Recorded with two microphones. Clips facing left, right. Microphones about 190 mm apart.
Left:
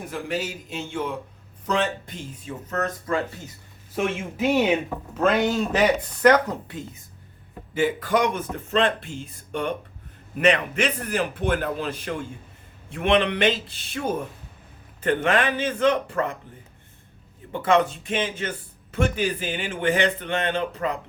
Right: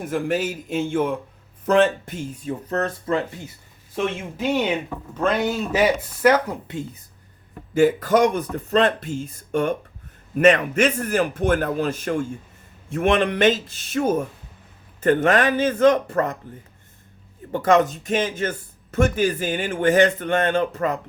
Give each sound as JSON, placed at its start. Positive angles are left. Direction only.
{"t": 0.1, "sound": "speech", "side_deg": -50}
{"t": 2.6, "sound": "a man's voice", "side_deg": -30}
{"t": 3.9, "sound": "speech", "side_deg": 5}
{"t": 7.7, "sound": "a man's voice", "side_deg": -45}
{"t": 17.5, "sound": "speech", "side_deg": -45}